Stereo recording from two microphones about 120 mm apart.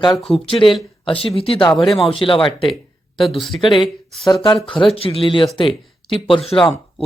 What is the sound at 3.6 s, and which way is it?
Speech, 40° left (ahead or behind).